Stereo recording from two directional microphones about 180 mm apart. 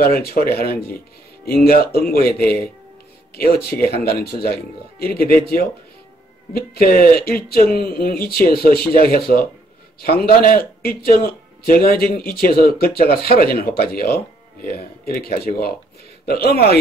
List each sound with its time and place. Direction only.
0.0 s speech: 60° left (ahead or behind)
6.5 s speech: 55° left (ahead or behind)